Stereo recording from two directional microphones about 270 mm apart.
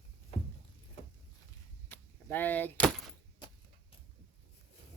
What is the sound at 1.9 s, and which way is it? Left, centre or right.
Door, centre.